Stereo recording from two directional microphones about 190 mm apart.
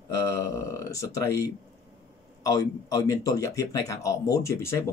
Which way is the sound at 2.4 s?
20° left (ahead or behind).